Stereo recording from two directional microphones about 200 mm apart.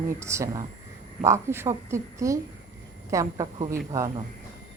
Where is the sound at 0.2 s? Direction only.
15° right (ahead or behind).